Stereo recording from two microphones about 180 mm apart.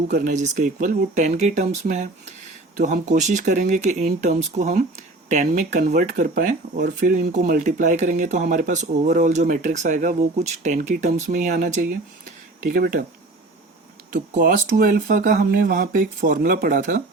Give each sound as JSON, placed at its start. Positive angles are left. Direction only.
{"t": 0.1, "sound": "speech", "side_deg": -50}
{"t": 14.1, "sound": "speech", "side_deg": -50}